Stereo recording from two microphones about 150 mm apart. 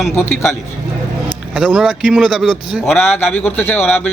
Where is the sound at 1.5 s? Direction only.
5° right (ahead or behind).